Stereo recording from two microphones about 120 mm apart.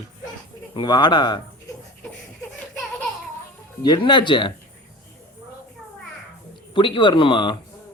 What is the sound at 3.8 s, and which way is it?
Speech, 35° left (ahead or behind).